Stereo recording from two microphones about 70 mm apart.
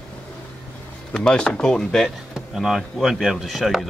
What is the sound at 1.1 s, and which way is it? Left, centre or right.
Speech, centre.